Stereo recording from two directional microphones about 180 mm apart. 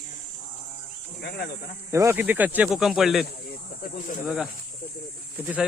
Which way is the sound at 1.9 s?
15° right (ahead or behind).